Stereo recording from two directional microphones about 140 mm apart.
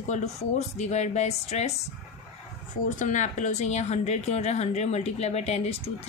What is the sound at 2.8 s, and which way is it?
A woman's voice, 60° left (ahead or behind).